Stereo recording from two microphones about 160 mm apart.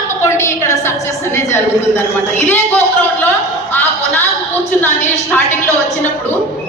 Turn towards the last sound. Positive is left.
turn(degrees=15)  # may be behind; listen again after turning